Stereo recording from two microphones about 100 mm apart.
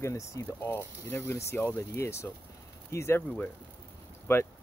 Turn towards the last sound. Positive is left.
turn(degrees=25)  # may be behind; listen again after turning